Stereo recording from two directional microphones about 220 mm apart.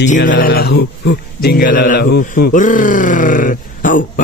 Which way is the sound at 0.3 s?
40° left (ahead or behind).